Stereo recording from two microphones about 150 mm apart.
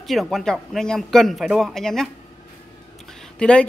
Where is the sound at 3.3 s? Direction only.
5° left (ahead or behind).